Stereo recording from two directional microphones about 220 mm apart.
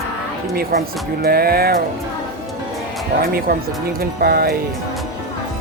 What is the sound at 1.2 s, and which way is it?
Speech, 45° right (ahead or behind).